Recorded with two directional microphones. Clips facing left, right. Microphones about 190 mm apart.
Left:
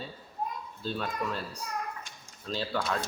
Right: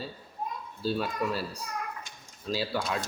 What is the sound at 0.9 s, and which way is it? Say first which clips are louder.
Speech: right 4 dB; 5° right (ahead or behind).